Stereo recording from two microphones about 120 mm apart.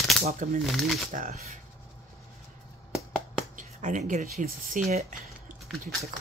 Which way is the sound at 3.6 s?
90° right.